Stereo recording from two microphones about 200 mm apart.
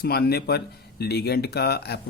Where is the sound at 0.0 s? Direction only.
50° left (ahead or behind).